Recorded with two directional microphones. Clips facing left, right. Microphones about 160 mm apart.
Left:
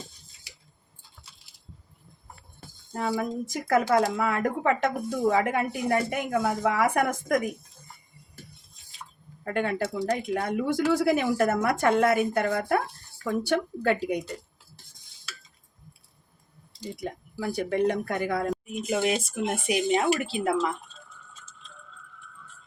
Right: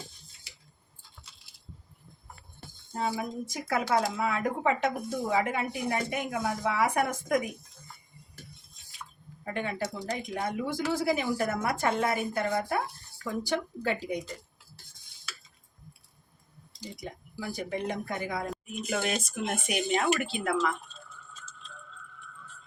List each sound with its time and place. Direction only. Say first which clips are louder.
2.9 s speech: left 3 dB; 65° left (ahead or behind)
9.4 s speech: left 5 dB; 65° left (ahead or behind)
17.0 s speech: left 6 dB; 65° left (ahead or behind)
18.7 s speech: left 4 dB; 20° left (ahead or behind)